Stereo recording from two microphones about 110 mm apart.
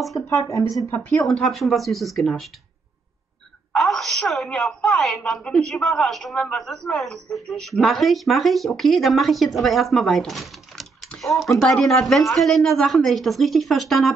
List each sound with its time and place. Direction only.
0.3 s speech: 30° left (ahead or behind)
1.1 s a woman's voice: 5° left (ahead or behind)
3.7 s a woman's voice: 5° left (ahead or behind)